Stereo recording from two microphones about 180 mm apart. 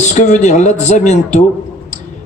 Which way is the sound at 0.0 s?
40° left (ahead or behind).